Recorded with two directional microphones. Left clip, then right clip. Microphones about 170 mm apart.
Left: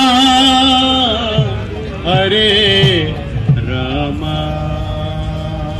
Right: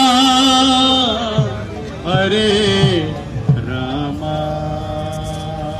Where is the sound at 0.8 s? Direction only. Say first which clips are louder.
Left 1 dB; 50° right (ahead or behind).